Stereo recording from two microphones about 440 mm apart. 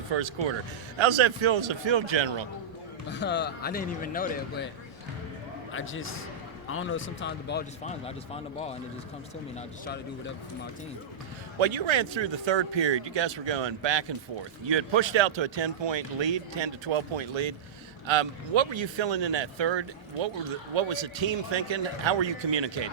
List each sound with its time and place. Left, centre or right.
0.1 s speech: right
0.9 s speech: right
3.1 s speech: left
5.7 s speech: left
11.6 s speech: right